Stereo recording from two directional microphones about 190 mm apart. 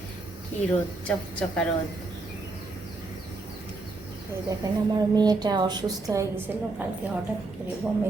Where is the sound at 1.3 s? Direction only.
5° left (ahead or behind).